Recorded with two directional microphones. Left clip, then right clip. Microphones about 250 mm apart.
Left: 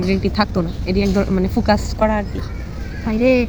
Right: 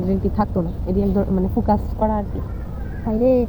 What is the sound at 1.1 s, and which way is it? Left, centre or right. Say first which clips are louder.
Speech: left 2 dB; left.